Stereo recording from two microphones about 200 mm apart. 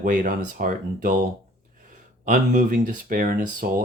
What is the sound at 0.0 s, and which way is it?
Speech, 40° right (ahead or behind).